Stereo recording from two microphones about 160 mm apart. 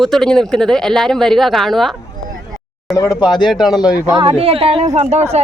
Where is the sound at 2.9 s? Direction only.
20° left (ahead or behind).